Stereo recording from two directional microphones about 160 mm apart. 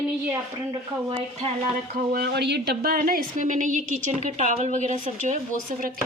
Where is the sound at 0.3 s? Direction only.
20° right (ahead or behind).